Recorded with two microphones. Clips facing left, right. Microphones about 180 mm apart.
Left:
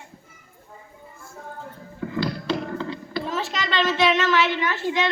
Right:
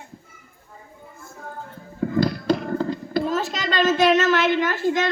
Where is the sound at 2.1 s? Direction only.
45° right (ahead or behind).